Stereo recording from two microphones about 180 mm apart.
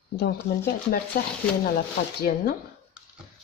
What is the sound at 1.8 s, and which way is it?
Speech, 55° left (ahead or behind).